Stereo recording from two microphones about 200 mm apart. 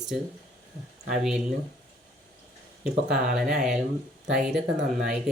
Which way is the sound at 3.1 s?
5° right (ahead or behind).